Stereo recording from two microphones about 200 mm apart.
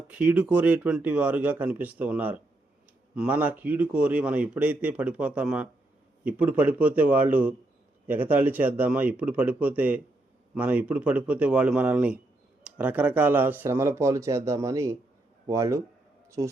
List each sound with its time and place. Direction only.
0.1 s a man's voice: 5° right (ahead or behind)